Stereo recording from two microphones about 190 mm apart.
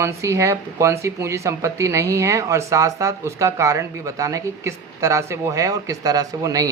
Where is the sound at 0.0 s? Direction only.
15° right (ahead or behind).